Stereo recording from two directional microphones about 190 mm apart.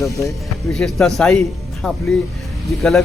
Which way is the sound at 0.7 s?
Centre (ahead or behind).